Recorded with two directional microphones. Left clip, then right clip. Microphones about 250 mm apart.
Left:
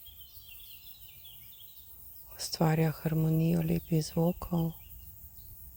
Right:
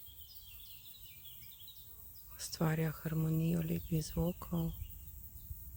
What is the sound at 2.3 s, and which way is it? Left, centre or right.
Speech, centre.